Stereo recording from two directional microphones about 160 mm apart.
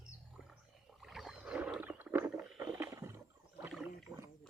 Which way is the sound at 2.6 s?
20° right (ahead or behind).